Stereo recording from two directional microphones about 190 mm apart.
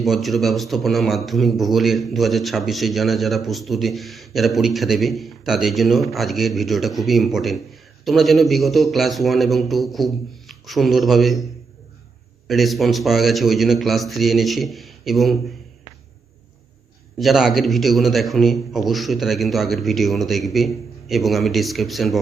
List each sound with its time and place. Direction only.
0.0 s a man's voice: centre (ahead or behind)
12.5 s speech: centre (ahead or behind)
17.2 s speech: centre (ahead or behind)